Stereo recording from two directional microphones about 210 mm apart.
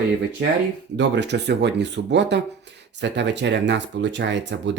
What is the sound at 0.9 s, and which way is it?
Speech, 55° right (ahead or behind).